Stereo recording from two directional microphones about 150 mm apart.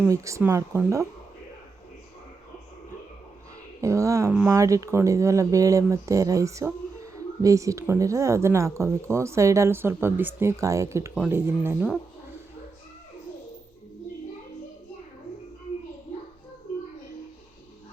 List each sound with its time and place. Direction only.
0.1 s speech: 20° right (ahead or behind)
3.8 s speech: 20° right (ahead or behind)